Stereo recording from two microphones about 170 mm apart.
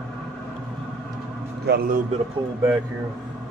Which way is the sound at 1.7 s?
75° right (ahead or behind).